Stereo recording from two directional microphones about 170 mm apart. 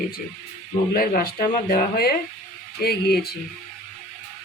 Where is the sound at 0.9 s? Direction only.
60° left (ahead or behind).